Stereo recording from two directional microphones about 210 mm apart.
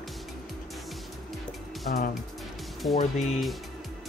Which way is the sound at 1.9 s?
40° left (ahead or behind).